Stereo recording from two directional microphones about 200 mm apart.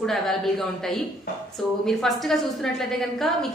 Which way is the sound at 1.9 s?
Centre (ahead or behind).